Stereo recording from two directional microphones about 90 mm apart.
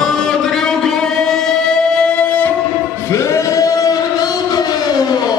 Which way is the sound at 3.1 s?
35° left (ahead or behind).